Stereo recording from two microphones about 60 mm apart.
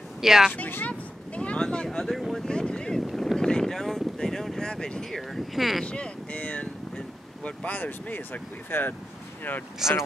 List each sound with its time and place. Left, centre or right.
0.2 s speech: centre
0.5 s speech: left
1.3 s a sound: left; by 2.4 s centre
2.4 s speech: centre
3.1 s boat: centre
3.3 s a sound: centre
5.3 s speech: centre
5.9 s speech: centre; by 8.9 s left
9.8 s speech: centre